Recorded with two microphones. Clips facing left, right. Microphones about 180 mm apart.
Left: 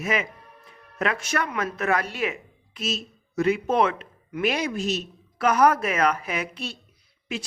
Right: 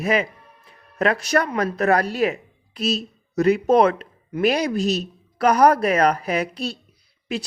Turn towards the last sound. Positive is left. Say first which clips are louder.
# right 5 dB
turn(degrees=-40)  # may be behind; listen again after turning